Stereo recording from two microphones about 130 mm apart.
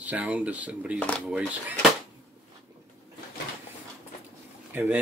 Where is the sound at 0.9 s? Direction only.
10° left (ahead or behind).